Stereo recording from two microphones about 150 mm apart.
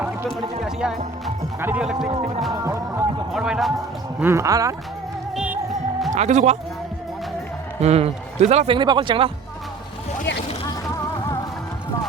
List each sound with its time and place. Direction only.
0.6 s speech: centre (ahead or behind)
2.5 s speech: 25° right (ahead or behind)
3.3 s music: 5° right (ahead or behind)
4.2 s speech: 15° right (ahead or behind)
5.3 s music: 5° right (ahead or behind)
6.1 s speech: 50° right (ahead or behind)
7.8 s speech: 45° right (ahead or behind)